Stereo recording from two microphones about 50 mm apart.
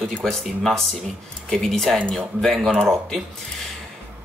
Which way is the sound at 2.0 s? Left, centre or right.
Centre.